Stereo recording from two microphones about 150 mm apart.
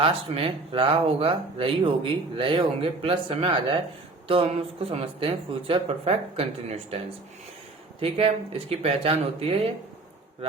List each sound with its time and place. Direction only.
0.0 s speech: 40° right (ahead or behind)
8.0 s speech: 40° right (ahead or behind)